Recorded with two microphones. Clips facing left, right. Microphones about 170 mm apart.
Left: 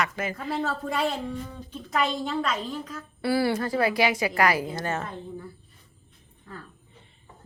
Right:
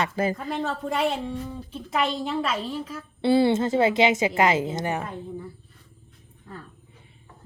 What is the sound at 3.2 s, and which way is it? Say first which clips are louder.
A woman's voice: right 5 dB; 25° right (ahead or behind).